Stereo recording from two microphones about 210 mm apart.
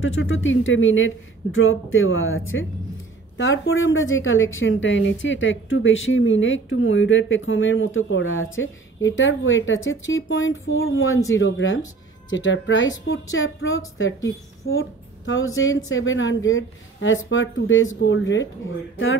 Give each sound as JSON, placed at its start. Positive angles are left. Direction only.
{"t": 0.0, "sound": "a woman's voice", "side_deg": 70}